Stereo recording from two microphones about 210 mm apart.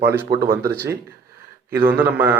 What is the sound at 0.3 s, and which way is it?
Speech, 45° right (ahead or behind).